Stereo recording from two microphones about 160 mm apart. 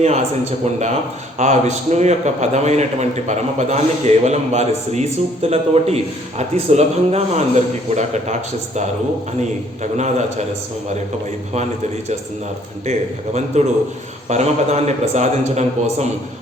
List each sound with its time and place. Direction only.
0.6 s a man's voice: 45° right (ahead or behind)
12.8 s a man's voice: 45° right (ahead or behind)